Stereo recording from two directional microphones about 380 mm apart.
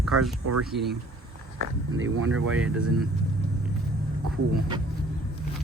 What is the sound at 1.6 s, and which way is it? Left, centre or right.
Speech, right.